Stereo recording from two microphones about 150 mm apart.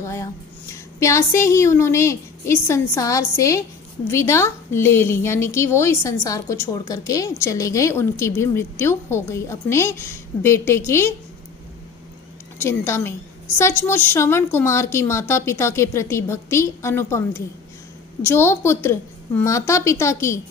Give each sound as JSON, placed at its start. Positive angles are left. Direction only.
{"t": 0.0, "sound": "a sound", "side_deg": 20}
{"t": 0.9, "sound": "a woman's voice", "side_deg": 20}
{"t": 12.5, "sound": "a woman's voice", "side_deg": 15}